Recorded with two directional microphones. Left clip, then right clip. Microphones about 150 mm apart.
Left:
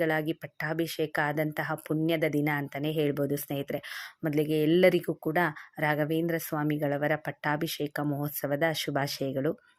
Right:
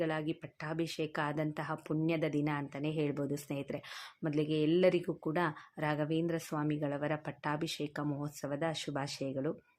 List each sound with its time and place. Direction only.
0.0 s speech: 35° left (ahead or behind)